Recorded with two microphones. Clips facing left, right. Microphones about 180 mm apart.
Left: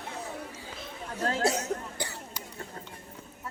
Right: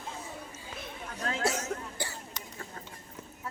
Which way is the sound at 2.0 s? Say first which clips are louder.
Left 1 dB; 15° left (ahead or behind).